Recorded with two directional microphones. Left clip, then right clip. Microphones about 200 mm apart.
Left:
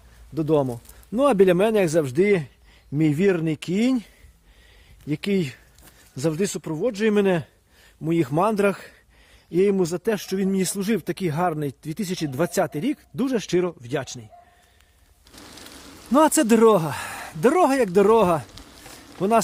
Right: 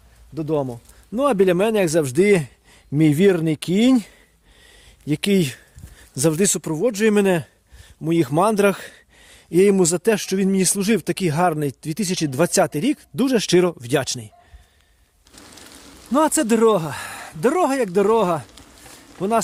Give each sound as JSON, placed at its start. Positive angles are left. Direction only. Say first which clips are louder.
{"t": 0.3, "sound": "speech", "louder": "left 2 dB", "side_deg": 0}
{"t": 1.1, "sound": "speech", "louder": "even", "side_deg": -20}
{"t": 2.9, "sound": "speech", "louder": "right 4 dB", "side_deg": -40}
{"t": 5.0, "sound": "speech", "louder": "right 5 dB", "side_deg": -50}
{"t": 15.3, "sound": "a sound", "louder": "even", "side_deg": 0}